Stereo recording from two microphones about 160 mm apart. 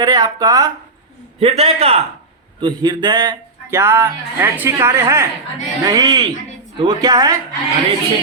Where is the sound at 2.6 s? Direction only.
25° right (ahead or behind).